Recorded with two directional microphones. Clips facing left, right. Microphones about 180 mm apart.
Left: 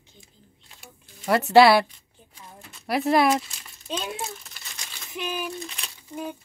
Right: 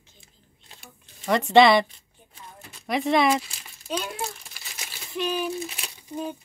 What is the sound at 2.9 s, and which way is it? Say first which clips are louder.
Speech: left 1 dB; 5° left (ahead or behind).